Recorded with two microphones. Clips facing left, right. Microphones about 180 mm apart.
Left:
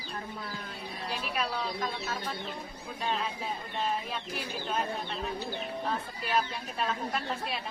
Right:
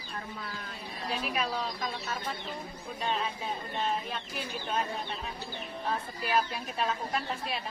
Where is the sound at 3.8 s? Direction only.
Centre (ahead or behind).